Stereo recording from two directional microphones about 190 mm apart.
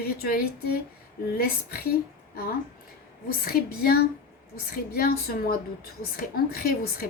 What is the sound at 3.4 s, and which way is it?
A woman's voice, 50° left (ahead or behind).